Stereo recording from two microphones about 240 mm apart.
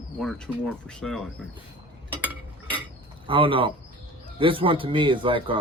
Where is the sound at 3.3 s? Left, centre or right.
Right.